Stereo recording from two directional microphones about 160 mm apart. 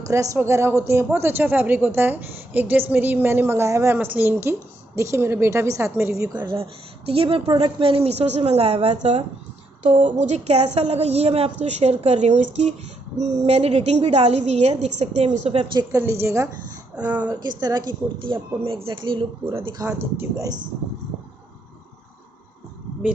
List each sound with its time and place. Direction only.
0.1 s a woman's voice: 20° right (ahead or behind); by 15.6 s 45° right (ahead or behind)
15.8 s speech: 20° right (ahead or behind)
17.3 s a woman's voice: 25° right (ahead or behind)
19.9 s speech: 15° right (ahead or behind)